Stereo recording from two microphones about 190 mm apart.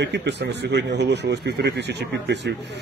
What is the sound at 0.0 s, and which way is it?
A man's voice, 65° right (ahead or behind).